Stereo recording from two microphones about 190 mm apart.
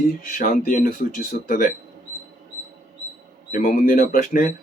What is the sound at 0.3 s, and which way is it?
Speech, 45° left (ahead or behind).